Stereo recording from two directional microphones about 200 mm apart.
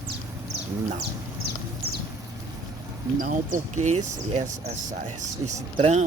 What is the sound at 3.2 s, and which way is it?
Speech, 40° right (ahead or behind).